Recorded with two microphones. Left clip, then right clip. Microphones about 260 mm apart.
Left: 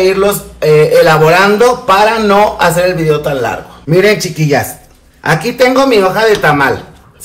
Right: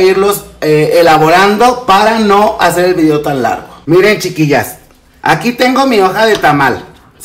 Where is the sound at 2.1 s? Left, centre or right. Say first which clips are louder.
Even; right.